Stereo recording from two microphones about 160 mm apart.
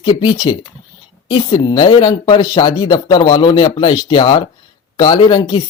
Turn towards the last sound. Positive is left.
turn(degrees=30)  # may be behind; listen again after turning